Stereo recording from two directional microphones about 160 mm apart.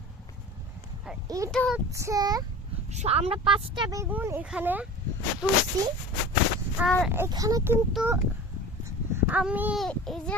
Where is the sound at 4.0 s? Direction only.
15° right (ahead or behind).